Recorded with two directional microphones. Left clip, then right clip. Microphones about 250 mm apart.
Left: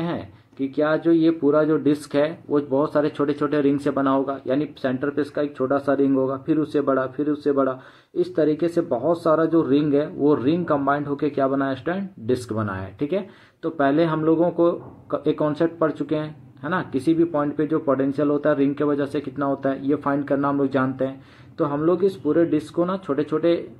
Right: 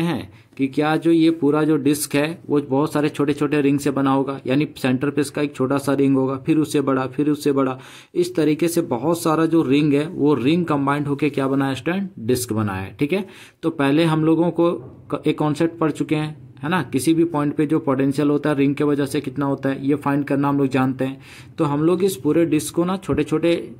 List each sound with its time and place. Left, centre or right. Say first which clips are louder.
0.0 s speech: right 3 dB; right